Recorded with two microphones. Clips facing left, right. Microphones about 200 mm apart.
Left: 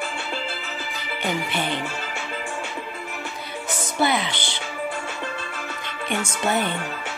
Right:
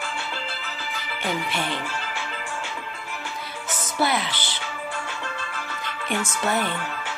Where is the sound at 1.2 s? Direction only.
Centre (ahead or behind).